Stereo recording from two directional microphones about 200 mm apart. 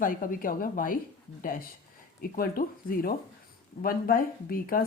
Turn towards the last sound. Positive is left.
turn(degrees=45)  # may be behind; listen again after turning